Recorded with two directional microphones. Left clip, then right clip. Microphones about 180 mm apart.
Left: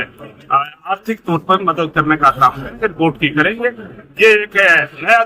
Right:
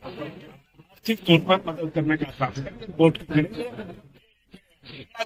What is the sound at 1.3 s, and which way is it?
Speech, 5° left (ahead or behind).